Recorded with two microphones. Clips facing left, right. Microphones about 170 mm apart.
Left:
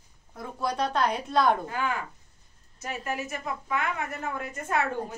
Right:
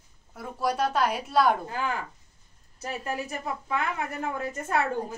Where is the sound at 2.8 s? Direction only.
30° right (ahead or behind).